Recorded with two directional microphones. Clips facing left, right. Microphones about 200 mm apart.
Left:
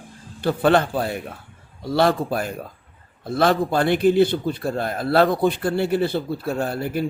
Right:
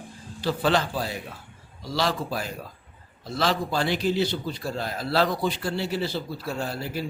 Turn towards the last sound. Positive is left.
turn(degrees=55)  # may be behind; listen again after turning